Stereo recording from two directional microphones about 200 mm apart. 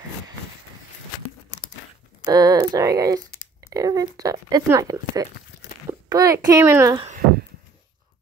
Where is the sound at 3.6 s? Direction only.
15° right (ahead or behind).